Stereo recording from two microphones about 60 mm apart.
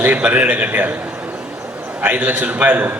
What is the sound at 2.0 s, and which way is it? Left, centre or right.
Speech, right.